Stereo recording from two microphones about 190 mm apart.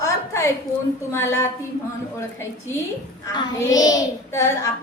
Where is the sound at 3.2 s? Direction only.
20° left (ahead or behind).